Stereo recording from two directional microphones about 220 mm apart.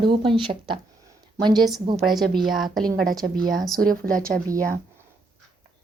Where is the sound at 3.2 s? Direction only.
40° right (ahead or behind).